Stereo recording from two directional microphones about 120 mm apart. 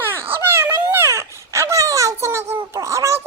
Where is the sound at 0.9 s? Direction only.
20° right (ahead or behind).